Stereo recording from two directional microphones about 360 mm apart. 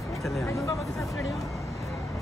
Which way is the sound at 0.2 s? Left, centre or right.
Centre.